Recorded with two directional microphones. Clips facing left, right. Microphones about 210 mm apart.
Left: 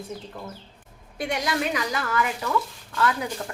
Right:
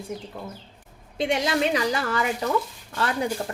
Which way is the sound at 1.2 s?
25° right (ahead or behind).